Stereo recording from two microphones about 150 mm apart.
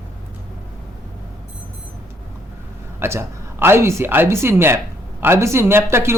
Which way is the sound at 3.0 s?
15° right (ahead or behind).